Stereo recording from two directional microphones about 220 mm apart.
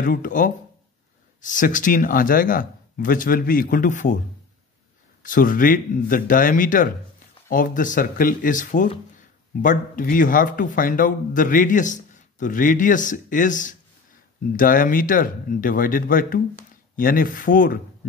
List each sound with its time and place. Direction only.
0.0 s speech: 40° left (ahead or behind)
5.2 s speech: 40° left (ahead or behind)